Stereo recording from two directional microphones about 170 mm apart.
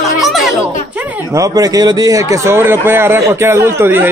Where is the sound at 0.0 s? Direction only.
Centre (ahead or behind).